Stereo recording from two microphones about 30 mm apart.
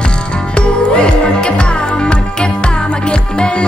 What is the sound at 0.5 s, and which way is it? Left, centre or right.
Music, left.